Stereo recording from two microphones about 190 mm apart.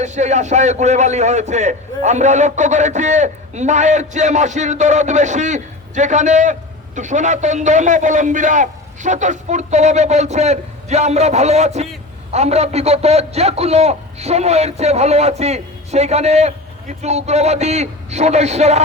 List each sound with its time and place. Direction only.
0.0 s a man's voice: 35° right (ahead or behind)